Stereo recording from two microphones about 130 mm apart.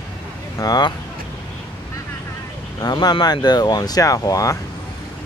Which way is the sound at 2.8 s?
35° left (ahead or behind).